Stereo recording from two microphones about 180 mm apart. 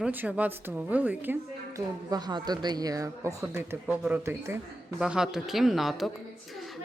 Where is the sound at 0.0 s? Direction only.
10° right (ahead or behind).